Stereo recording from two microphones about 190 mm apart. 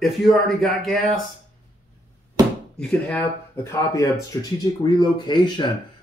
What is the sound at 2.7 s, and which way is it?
Speech, 5° left (ahead or behind).